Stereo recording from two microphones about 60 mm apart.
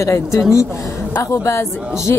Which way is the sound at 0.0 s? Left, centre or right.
Left.